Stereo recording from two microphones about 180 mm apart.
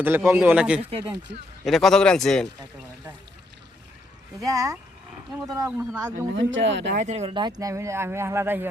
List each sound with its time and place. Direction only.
0.0 s speech: 15° right (ahead or behind)
1.3 s a man's voice: 70° right (ahead or behind)
1.6 s a man's voice: centre (ahead or behind)
4.4 s speech: 20° right (ahead or behind)
6.3 s speech: 90° right
6.9 s speech: 40° right (ahead or behind); by 8.6 s 15° right (ahead or behind)